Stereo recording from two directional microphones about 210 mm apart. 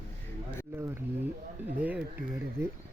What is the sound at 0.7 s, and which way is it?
Speech, 15° right (ahead or behind).